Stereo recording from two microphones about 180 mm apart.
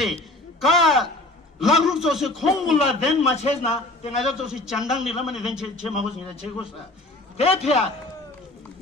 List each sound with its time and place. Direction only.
0.0 s a man's voice: centre (ahead or behind)
3.3 s a man's voice: 35° left (ahead or behind)
4.2 s a man's voice: centre (ahead or behind)
5.9 s a man's voice: 35° left (ahead or behind)